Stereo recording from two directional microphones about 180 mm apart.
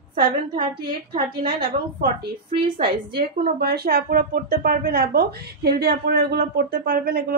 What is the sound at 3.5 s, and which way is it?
Speech, 60° right (ahead or behind).